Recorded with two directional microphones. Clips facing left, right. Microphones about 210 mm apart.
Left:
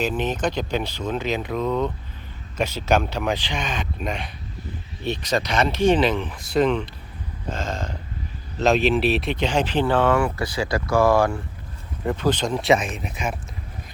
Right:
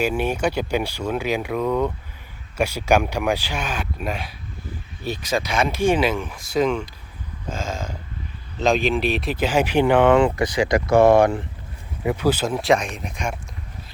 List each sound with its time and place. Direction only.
0.0 s speech: 10° right (ahead or behind)
12.0 s speech: 10° right (ahead or behind)